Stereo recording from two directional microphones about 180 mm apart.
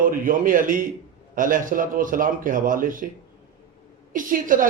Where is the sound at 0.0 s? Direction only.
50° right (ahead or behind).